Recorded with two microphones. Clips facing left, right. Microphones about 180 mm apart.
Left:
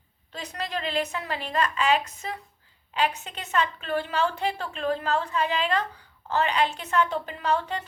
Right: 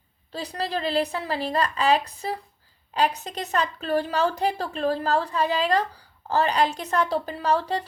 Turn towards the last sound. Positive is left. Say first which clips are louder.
# right 3 dB
turn(degrees=-35)  # may be behind; listen again after turning